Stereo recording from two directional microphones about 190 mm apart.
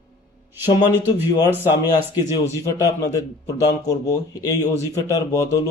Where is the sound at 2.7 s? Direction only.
20° left (ahead or behind).